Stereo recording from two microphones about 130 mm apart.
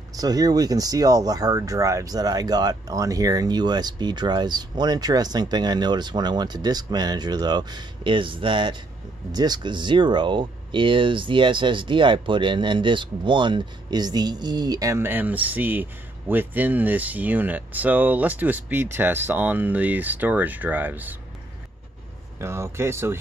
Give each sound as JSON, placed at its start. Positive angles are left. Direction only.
{"t": 0.1, "sound": "speech", "side_deg": -30}
{"t": 22.4, "sound": "speech", "side_deg": -20}